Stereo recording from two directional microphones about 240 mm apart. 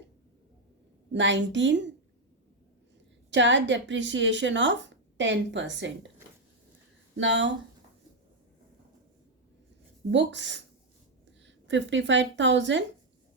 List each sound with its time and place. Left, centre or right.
1.1 s a woman's voice: right
3.2 s a woman's voice: right
7.2 s a woman's voice: right
10.1 s a woman's voice: right